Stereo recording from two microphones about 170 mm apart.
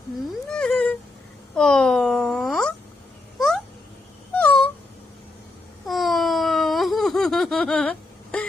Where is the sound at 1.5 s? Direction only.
5° left (ahead or behind).